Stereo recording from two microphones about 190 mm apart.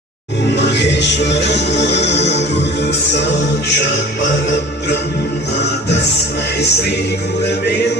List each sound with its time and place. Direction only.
0.5 s music: 65° left (ahead or behind)
3.7 s music: 70° left (ahead or behind)
5.5 s music: 65° left (ahead or behind)